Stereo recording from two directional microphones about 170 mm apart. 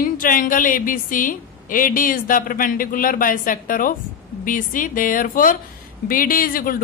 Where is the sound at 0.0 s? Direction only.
55° left (ahead or behind).